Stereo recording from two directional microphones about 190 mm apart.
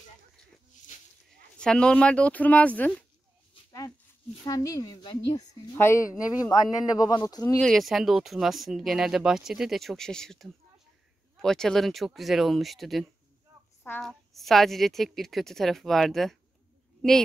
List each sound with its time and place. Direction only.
1.6 s speech: 5° left (ahead or behind)
4.5 s a woman's voice: 20° left (ahead or behind)
7.6 s speech: centre (ahead or behind)